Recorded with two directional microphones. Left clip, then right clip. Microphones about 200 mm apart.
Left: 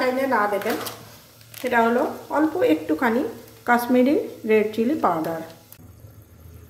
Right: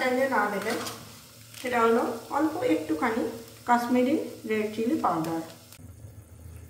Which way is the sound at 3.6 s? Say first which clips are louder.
Left 5 dB; 50° left (ahead or behind).